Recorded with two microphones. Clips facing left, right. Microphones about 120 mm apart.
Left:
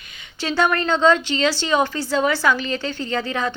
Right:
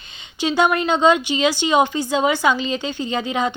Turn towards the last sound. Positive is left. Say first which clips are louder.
# right 2 dB
turn(degrees=-15)  # may be behind; listen again after turning